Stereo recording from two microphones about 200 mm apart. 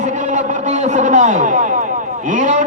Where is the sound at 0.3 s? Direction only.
35° right (ahead or behind).